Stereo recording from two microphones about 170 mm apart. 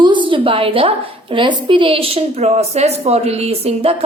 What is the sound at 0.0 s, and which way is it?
A woman's voice, 30° right (ahead or behind).